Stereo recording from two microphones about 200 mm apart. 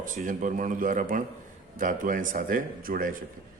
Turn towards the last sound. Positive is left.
turn(degrees=-45)  # may be behind; listen again after turning